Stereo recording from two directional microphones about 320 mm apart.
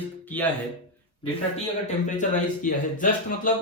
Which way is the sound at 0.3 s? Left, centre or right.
Centre.